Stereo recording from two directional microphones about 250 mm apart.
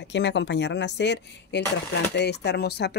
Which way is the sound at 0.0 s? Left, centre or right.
Left.